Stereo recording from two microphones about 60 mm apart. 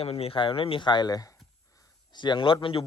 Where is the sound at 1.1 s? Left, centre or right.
Left.